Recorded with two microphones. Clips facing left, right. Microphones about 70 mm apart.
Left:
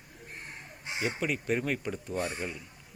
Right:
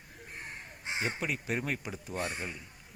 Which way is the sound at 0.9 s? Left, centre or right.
Right.